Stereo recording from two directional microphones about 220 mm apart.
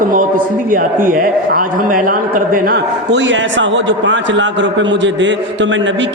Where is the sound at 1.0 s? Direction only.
40° right (ahead or behind).